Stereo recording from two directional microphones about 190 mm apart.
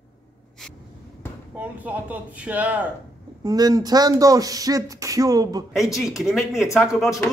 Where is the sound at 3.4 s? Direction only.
20° right (ahead or behind).